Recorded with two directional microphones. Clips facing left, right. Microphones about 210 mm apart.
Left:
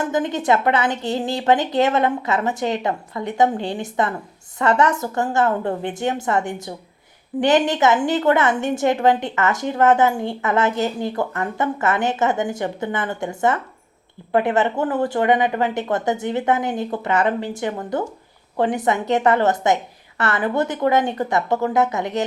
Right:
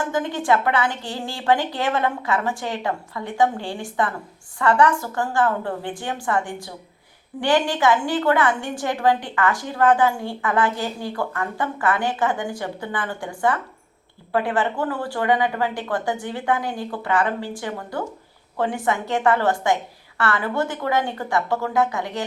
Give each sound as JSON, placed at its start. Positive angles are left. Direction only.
{"t": 0.0, "sound": "a woman's voice", "side_deg": 20}